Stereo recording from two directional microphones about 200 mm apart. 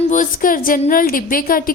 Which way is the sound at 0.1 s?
40° left (ahead or behind).